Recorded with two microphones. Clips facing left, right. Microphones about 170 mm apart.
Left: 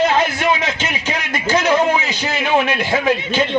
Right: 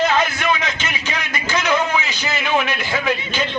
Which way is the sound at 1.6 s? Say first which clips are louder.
Left 4 dB; 30° left (ahead or behind).